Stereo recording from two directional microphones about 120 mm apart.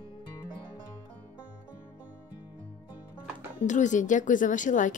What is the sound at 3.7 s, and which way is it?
Speech, 90° left.